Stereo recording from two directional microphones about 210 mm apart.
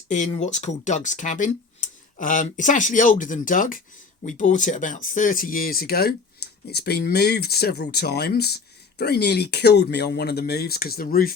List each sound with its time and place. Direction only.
0.1 s speech: 35° left (ahead or behind)